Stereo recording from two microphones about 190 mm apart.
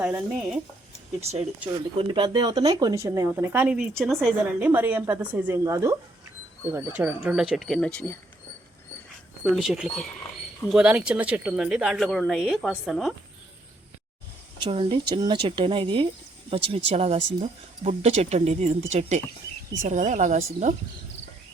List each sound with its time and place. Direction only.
0.0 s speech: 10° right (ahead or behind)
2.0 s speech: 25° right (ahead or behind); by 8.1 s 5° left (ahead or behind)
9.4 s speech: centre (ahead or behind)
14.6 s speech: 25° right (ahead or behind)